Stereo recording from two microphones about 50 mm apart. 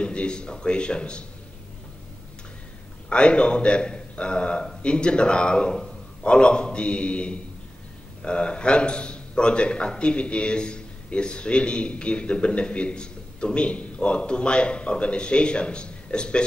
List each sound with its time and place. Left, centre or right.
0.0 s a man's voice: left
3.1 s a man's voice: left